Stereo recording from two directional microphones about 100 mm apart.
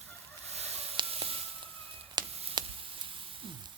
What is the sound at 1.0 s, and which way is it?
Music, 75° right (ahead or behind).